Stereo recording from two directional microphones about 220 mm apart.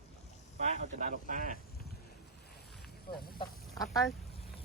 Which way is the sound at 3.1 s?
20° left (ahead or behind).